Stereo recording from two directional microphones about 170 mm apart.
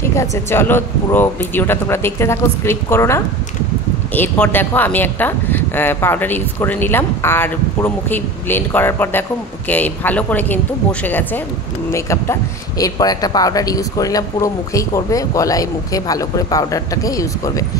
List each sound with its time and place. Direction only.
0.0 s speech: 15° left (ahead or behind)